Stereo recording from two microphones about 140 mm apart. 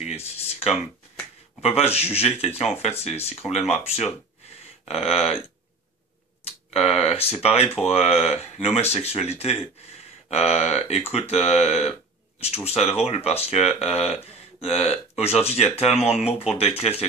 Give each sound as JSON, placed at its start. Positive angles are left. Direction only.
{"t": 0.0, "sound": "a sound", "side_deg": 50}
{"t": 1.6, "sound": "speech", "side_deg": 45}
{"t": 6.4, "sound": "speech", "side_deg": 45}